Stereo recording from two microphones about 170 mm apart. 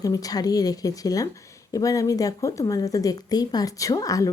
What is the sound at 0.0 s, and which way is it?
Speech, 20° left (ahead or behind).